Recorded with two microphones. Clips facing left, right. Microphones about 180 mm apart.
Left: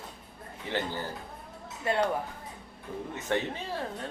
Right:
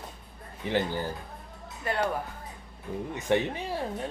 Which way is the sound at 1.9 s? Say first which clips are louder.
Left 2 dB; 25° left (ahead or behind).